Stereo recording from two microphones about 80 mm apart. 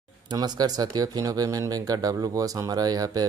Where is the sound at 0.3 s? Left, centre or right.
Right.